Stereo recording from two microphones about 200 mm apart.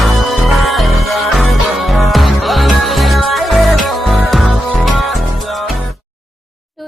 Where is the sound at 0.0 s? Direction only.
Centre (ahead or behind).